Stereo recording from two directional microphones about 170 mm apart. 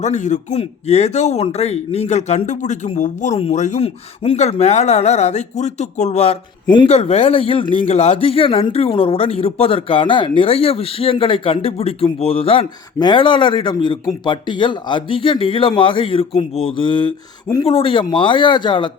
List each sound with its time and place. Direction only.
0.0 s a man's voice: 45° left (ahead or behind); by 18.9 s 25° left (ahead or behind)